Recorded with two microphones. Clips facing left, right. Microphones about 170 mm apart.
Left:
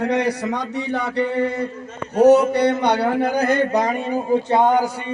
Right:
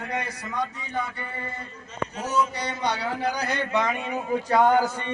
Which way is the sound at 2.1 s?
65° left (ahead or behind).